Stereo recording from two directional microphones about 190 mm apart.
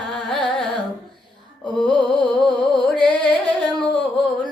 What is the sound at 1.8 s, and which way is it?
Music, 25° left (ahead or behind).